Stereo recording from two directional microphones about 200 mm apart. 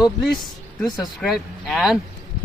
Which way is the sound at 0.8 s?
Centre (ahead or behind).